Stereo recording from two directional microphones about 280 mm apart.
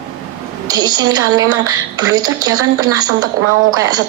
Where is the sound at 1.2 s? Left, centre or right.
Right.